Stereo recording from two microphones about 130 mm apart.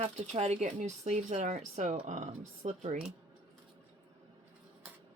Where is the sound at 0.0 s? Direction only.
55° right (ahead or behind).